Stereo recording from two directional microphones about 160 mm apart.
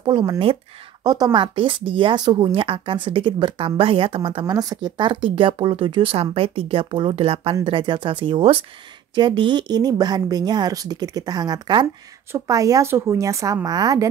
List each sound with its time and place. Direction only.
0.0 s speech: 25° right (ahead or behind)